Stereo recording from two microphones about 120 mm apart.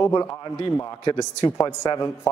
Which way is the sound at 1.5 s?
30° left (ahead or behind).